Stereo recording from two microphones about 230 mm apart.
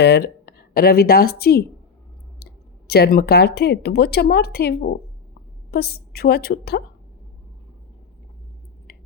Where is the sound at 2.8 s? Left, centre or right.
Left.